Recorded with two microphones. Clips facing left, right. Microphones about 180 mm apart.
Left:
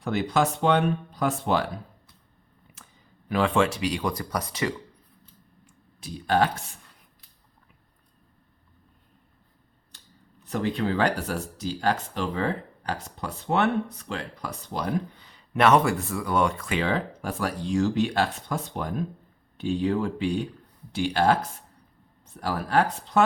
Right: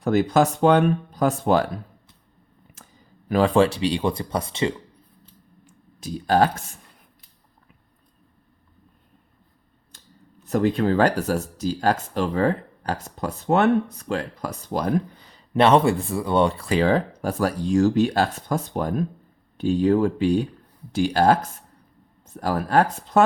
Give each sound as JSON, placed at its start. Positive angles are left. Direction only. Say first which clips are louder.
{"t": 0.0, "sound": "speech", "louder": "right 6 dB", "side_deg": -45}
{"t": 2.8, "sound": "a sound", "louder": "right 3 dB", "side_deg": -40}
{"t": 3.2, "sound": "speech", "louder": "right 5 dB", "side_deg": -40}
{"t": 6.0, "sound": "speech", "louder": "right 4 dB", "side_deg": -40}
{"t": 10.4, "sound": "speech", "louder": "right 6 dB", "side_deg": -45}
{"t": 15.5, "sound": "speech", "louder": "right 3 dB", "side_deg": -30}
{"t": 22.4, "sound": "speech", "louder": "right 4 dB", "side_deg": -45}